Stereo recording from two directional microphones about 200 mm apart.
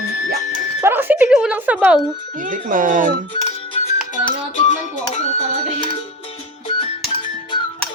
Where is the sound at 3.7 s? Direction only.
30° left (ahead or behind).